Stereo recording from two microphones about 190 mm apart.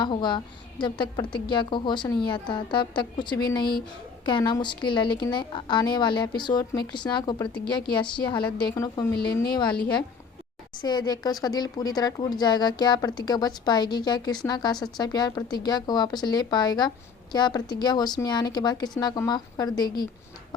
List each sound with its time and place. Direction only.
0.0 s speech: 25° left (ahead or behind)
10.8 s speech: 20° left (ahead or behind)